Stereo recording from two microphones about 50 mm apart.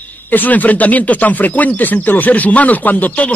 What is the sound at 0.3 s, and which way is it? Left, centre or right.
A man's voice, left.